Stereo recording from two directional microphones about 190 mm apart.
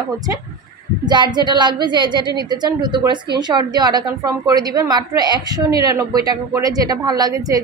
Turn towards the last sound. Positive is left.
turn(degrees=-20)  # may be behind; listen again after turning